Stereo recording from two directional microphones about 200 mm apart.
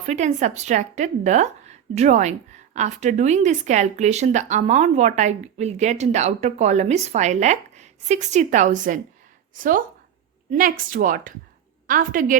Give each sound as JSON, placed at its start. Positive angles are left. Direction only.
{"t": 0.0, "sound": "a woman's voice", "side_deg": -35}